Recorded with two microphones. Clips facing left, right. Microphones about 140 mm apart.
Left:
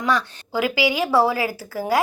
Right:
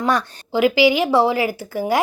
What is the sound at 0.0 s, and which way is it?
Speech, 45° right (ahead or behind).